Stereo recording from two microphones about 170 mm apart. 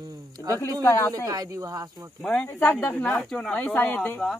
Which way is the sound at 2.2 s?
10° left (ahead or behind).